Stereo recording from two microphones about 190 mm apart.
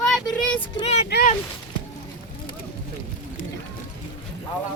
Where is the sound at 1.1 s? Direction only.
50° left (ahead or behind).